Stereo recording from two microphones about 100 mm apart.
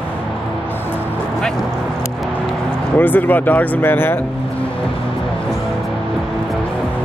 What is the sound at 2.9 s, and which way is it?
Speech, 20° left (ahead or behind).